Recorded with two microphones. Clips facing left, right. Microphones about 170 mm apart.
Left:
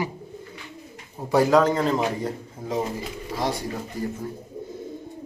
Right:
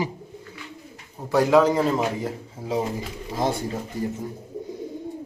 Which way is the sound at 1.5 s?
10° right (ahead or behind).